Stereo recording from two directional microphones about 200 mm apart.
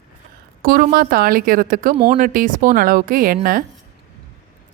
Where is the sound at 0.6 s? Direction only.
45° right (ahead or behind).